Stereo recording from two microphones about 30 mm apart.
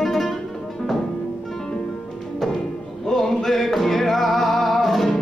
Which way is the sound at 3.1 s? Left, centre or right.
Centre.